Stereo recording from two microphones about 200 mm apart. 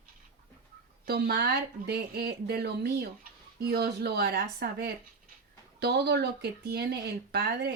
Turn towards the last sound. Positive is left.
turn(degrees=-50)  # may be behind; listen again after turning